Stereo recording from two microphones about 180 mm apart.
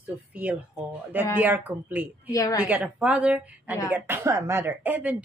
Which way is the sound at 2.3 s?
20° left (ahead or behind).